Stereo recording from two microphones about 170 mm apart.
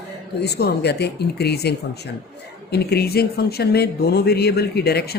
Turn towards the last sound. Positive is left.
turn(degrees=70)  # may be behind; listen again after turning